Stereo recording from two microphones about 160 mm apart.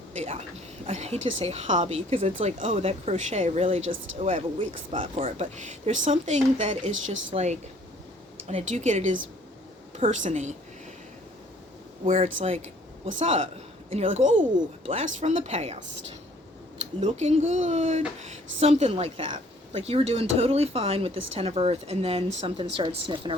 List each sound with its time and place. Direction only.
0.1 s a woman's voice: 45° right (ahead or behind)
12.0 s a woman's voice: 50° right (ahead or behind)
17.0 s a woman's voice: 45° right (ahead or behind)